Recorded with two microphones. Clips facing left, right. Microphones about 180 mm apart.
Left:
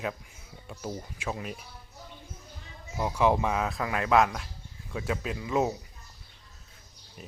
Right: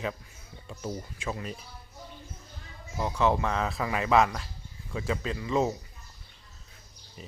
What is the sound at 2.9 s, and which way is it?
Speech, 10° left (ahead or behind).